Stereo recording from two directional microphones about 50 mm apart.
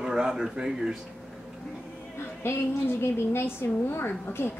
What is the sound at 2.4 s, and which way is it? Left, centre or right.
A woman's voice, left.